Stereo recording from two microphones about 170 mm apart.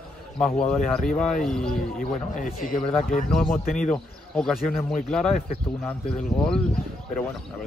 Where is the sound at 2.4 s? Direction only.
50° left (ahead or behind).